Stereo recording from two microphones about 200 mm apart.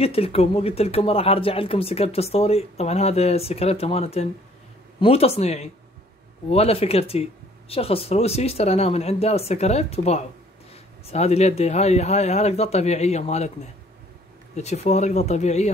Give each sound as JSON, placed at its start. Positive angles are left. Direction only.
{"t": 0.0, "sound": "speech", "side_deg": 30}
{"t": 14.5, "sound": "speech", "side_deg": 35}